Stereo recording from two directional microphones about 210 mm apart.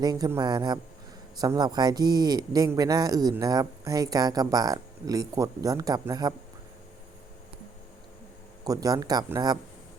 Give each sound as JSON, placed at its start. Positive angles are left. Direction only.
{"t": 0.0, "sound": "a man's voice", "side_deg": -20}
{"t": 8.6, "sound": "a man's voice", "side_deg": -15}